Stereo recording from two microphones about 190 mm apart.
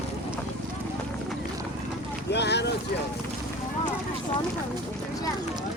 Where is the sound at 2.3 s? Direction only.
65° left (ahead or behind).